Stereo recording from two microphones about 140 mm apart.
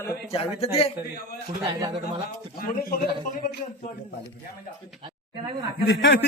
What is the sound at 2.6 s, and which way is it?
Speech, 90° left.